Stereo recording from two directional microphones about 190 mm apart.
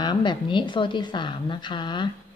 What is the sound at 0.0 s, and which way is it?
A woman's voice, 25° left (ahead or behind).